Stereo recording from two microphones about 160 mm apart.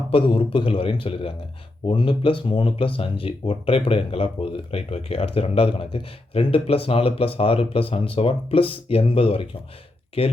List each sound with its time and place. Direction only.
0.1 s speech: 35° left (ahead or behind)